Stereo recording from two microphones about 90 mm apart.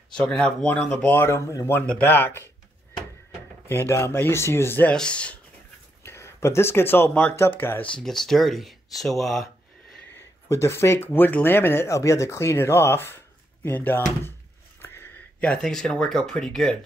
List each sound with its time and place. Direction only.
0.1 s speech: 10° left (ahead or behind)
1.1 s speech: 30° left (ahead or behind)
1.9 s speech: 20° left (ahead or behind)
3.6 s speech: 25° left (ahead or behind)
4.8 s speech: 10° left (ahead or behind)
6.0 s speech: 30° left (ahead or behind)
8.0 s speech: 5° left (ahead or behind)
10.1 s speech: 30° left (ahead or behind)
14.8 s a sound: 25° left (ahead or behind)
15.4 s speech: 10° left (ahead or behind)